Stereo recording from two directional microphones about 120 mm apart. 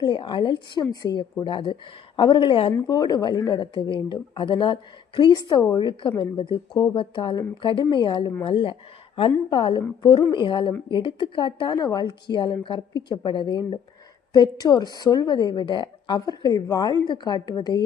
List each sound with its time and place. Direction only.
0.0 s speech: 40° left (ahead or behind)
2.8 s speech: 30° left (ahead or behind)